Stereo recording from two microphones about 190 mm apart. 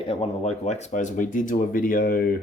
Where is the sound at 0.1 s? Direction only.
35° left (ahead or behind).